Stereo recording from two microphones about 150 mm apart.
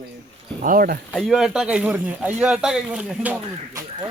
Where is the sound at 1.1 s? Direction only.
Centre (ahead or behind).